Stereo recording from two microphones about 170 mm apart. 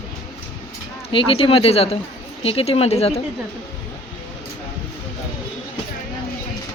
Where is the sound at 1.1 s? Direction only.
30° left (ahead or behind).